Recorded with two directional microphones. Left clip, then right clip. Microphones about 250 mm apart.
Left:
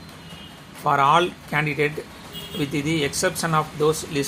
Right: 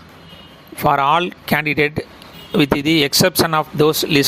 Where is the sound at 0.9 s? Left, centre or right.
Right.